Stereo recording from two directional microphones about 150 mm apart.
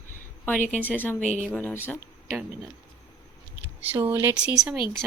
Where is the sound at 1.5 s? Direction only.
10° left (ahead or behind).